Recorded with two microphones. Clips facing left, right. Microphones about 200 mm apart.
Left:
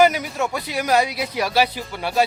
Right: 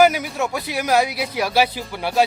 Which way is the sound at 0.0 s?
5° right (ahead or behind).